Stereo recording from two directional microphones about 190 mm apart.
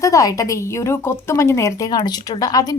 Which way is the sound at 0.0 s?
20° left (ahead or behind).